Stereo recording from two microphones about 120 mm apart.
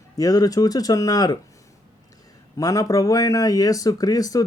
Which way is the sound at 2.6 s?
30° left (ahead or behind).